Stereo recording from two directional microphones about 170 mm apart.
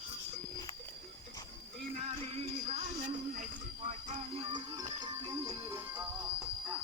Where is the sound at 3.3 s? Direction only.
45° right (ahead or behind).